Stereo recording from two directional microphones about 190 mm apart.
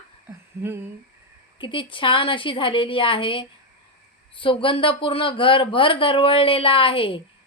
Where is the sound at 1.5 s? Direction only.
25° left (ahead or behind).